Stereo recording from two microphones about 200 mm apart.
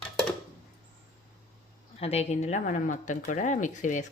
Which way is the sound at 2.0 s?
30° left (ahead or behind).